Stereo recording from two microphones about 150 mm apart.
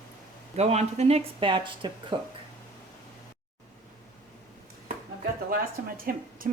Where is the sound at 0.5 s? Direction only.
45° right (ahead or behind).